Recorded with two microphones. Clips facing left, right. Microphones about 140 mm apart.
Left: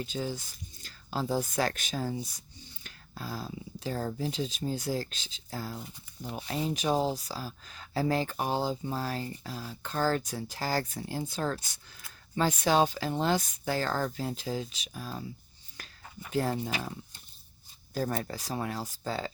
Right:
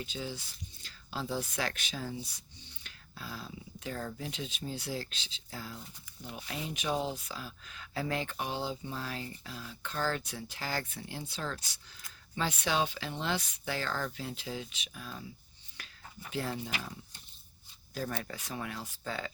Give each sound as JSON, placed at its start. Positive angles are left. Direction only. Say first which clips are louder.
{"t": 0.0, "sound": "speech", "louder": "left 5 dB", "side_deg": 45}
{"t": 15.8, "sound": "a sound", "louder": "left 3 dB", "side_deg": 40}
{"t": 16.3, "sound": "speech", "louder": "left 6 dB", "side_deg": 40}
{"t": 17.9, "sound": "speech", "louder": "left 5 dB", "side_deg": 40}